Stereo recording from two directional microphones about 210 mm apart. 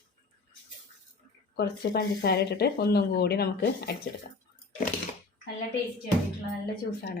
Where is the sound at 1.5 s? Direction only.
50° left (ahead or behind).